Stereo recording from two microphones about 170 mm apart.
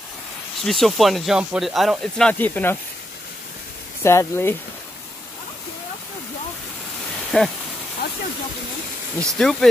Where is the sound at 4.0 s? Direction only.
15° left (ahead or behind).